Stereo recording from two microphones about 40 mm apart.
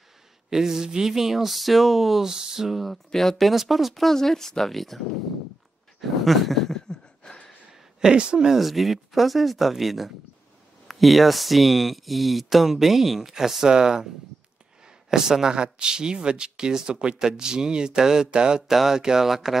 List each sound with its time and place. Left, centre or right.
0.5 s speech: centre
2.7 s speech: centre
6.2 s a sound: centre
8.0 s speech: right
8.5 s speech: centre
15.0 s a man's voice: centre
18.7 s speech: centre